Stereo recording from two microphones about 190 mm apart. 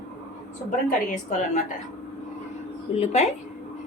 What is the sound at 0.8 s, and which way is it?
Speech, 40° left (ahead or behind).